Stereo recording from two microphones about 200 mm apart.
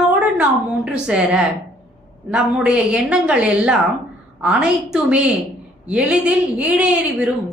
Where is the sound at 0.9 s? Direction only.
5° right (ahead or behind).